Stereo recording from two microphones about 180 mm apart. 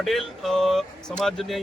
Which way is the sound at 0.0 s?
Centre (ahead or behind).